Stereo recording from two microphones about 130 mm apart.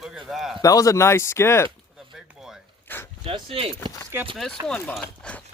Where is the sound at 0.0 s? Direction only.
5° right (ahead or behind).